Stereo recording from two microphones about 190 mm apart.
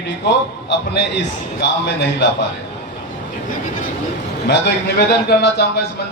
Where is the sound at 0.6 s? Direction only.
65° left (ahead or behind).